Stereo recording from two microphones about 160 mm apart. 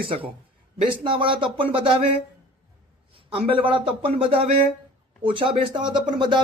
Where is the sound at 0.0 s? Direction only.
35° right (ahead or behind).